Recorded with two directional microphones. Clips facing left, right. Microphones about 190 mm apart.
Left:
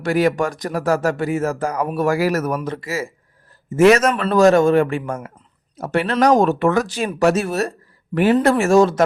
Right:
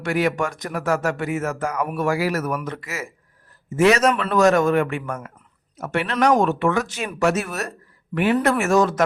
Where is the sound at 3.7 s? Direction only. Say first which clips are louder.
Left 4 dB; 45° left (ahead or behind).